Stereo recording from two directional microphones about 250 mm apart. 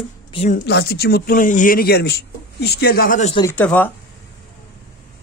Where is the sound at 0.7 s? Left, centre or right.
Left.